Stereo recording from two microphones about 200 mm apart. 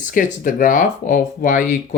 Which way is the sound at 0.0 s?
40° left (ahead or behind).